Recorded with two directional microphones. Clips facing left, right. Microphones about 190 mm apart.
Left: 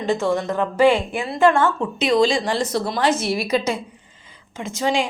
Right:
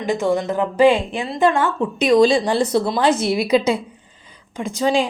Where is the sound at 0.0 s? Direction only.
15° right (ahead or behind).